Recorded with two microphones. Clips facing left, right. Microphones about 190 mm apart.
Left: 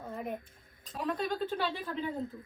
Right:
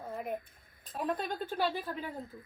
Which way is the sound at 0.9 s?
50° right (ahead or behind).